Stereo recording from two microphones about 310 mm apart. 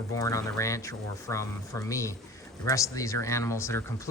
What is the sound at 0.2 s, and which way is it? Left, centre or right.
Speech, centre.